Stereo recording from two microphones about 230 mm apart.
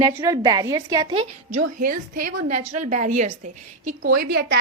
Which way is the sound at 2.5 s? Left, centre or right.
Right.